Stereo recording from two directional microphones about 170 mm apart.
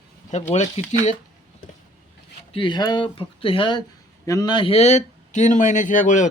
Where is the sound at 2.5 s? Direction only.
30° left (ahead or behind).